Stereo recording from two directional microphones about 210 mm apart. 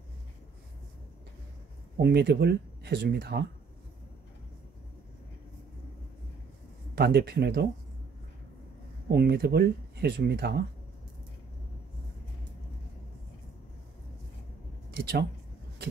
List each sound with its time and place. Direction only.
2.0 s speech: 50° right (ahead or behind)
7.0 s speech: 50° right (ahead or behind)
9.1 s speech: 50° right (ahead or behind)
14.9 s speech: 50° right (ahead or behind)